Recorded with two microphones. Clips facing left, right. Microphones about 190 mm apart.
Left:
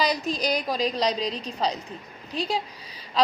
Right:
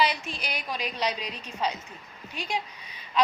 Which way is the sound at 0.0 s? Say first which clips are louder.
Left 3 dB; 40° left (ahead or behind).